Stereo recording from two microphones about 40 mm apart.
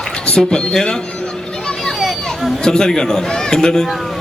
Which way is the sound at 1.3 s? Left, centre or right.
Centre.